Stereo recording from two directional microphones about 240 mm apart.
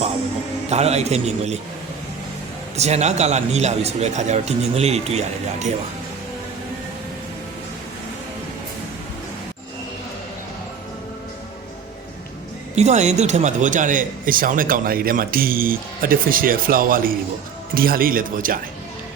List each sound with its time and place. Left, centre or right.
0.7 s speech: right
2.7 s speech: right
12.7 s speech: right